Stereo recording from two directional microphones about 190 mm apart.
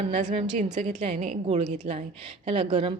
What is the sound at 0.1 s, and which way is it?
A woman's voice, 40° right (ahead or behind).